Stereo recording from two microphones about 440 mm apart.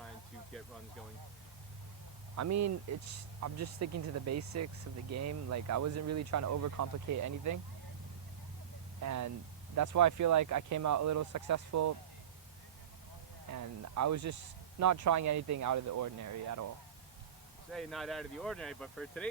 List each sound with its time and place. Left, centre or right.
0.5 s a sound: centre
2.3 s speech: right
9.0 s speech: right
13.5 s speech: right
17.7 s speech: centre